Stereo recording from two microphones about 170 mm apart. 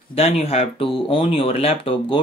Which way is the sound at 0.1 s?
35° left (ahead or behind).